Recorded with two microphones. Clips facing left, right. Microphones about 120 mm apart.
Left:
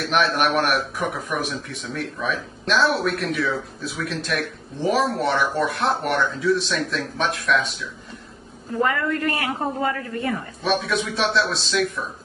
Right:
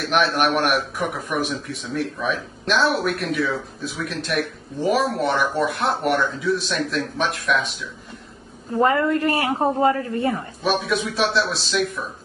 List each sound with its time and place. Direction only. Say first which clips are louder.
0.1 s speech: right 1 dB; centre (ahead or behind)
8.7 s a woman's voice: right 4 dB; 25° right (ahead or behind)
10.6 s speech: right 1 dB; centre (ahead or behind)